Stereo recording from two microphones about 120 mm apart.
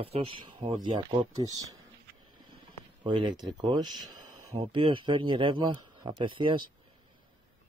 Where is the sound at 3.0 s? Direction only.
40° right (ahead or behind).